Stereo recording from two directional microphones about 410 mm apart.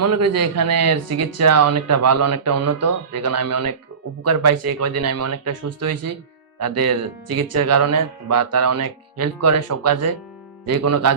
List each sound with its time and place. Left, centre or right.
0.0 s speech: right